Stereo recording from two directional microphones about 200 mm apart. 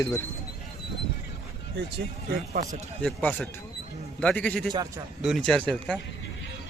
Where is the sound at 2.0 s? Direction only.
50° right (ahead or behind).